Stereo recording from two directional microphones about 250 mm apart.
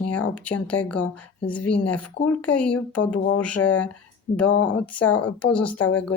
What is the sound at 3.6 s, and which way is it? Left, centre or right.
Speech, left.